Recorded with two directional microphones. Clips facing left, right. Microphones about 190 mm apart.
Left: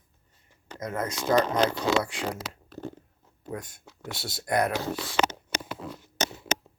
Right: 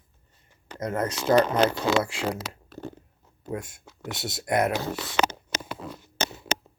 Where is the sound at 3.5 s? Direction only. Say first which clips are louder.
Right 3 dB; 25° right (ahead or behind).